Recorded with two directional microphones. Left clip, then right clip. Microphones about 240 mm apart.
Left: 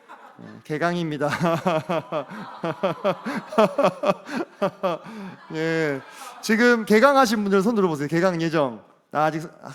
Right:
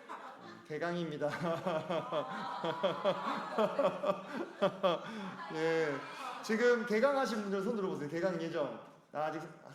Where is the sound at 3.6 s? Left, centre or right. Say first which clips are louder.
Left 14 dB; left.